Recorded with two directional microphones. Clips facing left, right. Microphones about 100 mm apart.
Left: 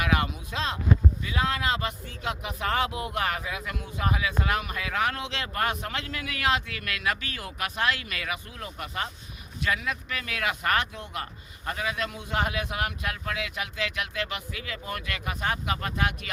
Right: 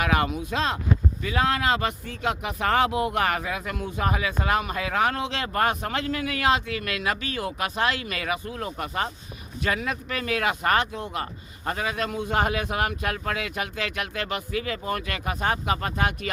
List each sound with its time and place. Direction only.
0.0 s speech: 45° right (ahead or behind)